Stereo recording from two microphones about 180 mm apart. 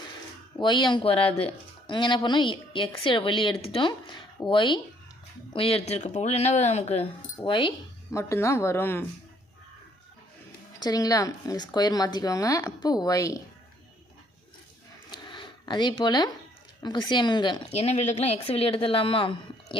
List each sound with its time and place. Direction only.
0.6 s speech: 25° left (ahead or behind)
8.1 s speech: 15° left (ahead or behind)
10.8 s speech: 20° left (ahead or behind)
15.1 s a sound: 25° left (ahead or behind)
16.8 s speech: 25° left (ahead or behind)